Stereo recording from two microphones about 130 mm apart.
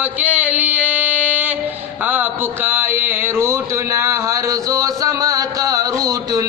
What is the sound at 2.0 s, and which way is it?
Mantra, 15° right (ahead or behind).